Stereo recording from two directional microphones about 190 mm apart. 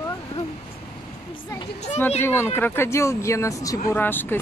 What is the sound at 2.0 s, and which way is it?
Speech, 10° left (ahead or behind).